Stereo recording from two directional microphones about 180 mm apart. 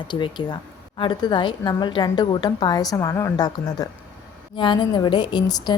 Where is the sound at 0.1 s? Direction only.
25° left (ahead or behind).